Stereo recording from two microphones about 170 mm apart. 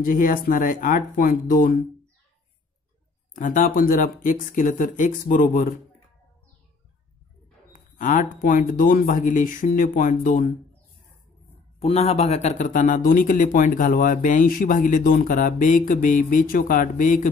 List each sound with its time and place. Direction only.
0.0 s speech: 55° left (ahead or behind)
3.3 s a man's voice: 50° left (ahead or behind)
7.7 s a man's voice: 50° left (ahead or behind)
11.8 s a man's voice: 40° left (ahead or behind)